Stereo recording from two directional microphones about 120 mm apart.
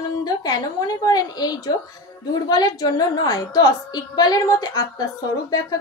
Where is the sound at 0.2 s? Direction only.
35° left (ahead or behind).